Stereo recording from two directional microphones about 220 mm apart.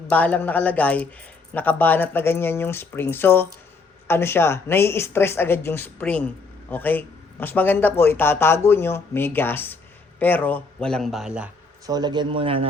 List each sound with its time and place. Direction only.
0.1 s a woman's voice: 5° left (ahead or behind)
11.9 s a man's voice: 20° right (ahead or behind)